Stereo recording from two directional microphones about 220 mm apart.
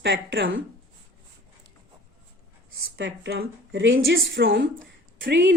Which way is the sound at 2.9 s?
60° right (ahead or behind).